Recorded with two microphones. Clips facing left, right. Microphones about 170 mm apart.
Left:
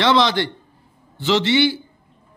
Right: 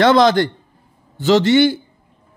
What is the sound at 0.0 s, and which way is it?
A man's voice, 45° right (ahead or behind).